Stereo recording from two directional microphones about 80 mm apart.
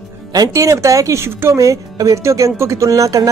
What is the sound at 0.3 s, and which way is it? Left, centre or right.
Speech, right.